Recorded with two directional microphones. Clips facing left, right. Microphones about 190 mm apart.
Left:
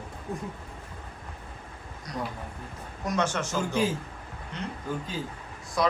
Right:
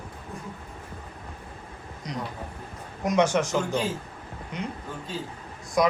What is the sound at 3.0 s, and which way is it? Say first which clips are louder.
Speech: right 6 dB; 15° right (ahead or behind).